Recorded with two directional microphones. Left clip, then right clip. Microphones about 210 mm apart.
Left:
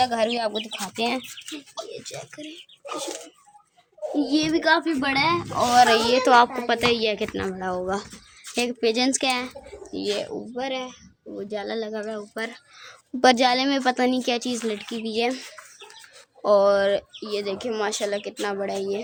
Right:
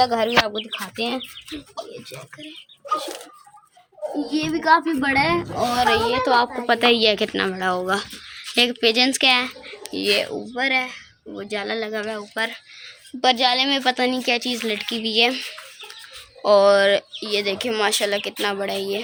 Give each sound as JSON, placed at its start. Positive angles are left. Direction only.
{"t": 0.0, "sound": "speech", "side_deg": -5}
{"t": 4.3, "sound": "speech", "side_deg": 0}
{"t": 5.7, "sound": "a woman's voice", "side_deg": 15}
{"t": 6.7, "sound": "a woman's voice", "side_deg": -10}
{"t": 9.9, "sound": "speech", "side_deg": -15}
{"t": 10.2, "sound": "speech", "side_deg": -25}
{"t": 12.3, "sound": "speech", "side_deg": 5}
{"t": 13.2, "sound": "a woman's voice", "side_deg": 35}